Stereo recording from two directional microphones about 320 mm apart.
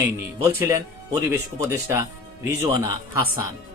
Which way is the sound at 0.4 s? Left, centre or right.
Centre.